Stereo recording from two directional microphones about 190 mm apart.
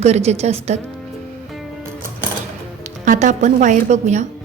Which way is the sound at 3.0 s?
40° right (ahead or behind).